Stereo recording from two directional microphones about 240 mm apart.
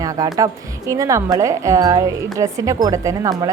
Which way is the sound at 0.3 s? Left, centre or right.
Centre.